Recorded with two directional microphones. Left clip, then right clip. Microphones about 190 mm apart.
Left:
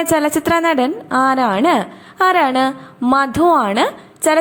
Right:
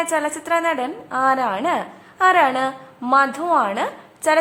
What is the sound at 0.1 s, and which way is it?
A woman's voice, 30° left (ahead or behind).